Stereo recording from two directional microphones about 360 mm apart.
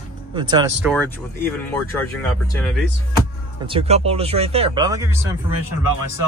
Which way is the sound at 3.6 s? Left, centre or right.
Centre.